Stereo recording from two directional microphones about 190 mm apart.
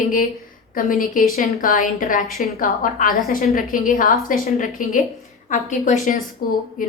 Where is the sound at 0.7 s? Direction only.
45° left (ahead or behind).